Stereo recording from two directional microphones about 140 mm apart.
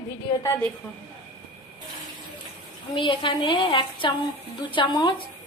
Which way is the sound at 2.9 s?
35° left (ahead or behind).